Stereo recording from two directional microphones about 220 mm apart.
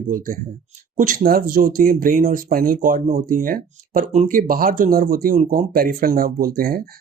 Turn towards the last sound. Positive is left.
turn(degrees=-40)  # may be behind; listen again after turning